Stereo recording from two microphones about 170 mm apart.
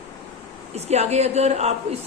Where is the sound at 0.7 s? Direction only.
40° right (ahead or behind).